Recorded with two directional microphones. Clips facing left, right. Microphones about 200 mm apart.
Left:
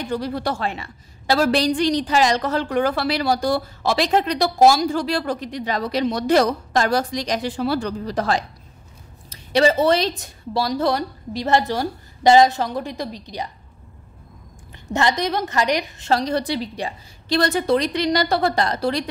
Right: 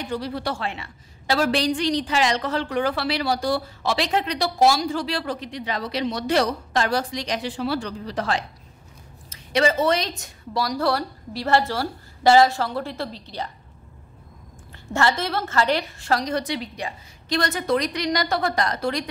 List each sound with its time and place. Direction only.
0.1 s a woman's voice: 45° left (ahead or behind); by 13.5 s 15° left (ahead or behind)
14.9 s a woman's voice: 15° left (ahead or behind)